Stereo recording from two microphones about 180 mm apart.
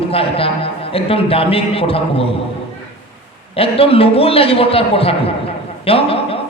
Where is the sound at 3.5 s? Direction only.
30° left (ahead or behind).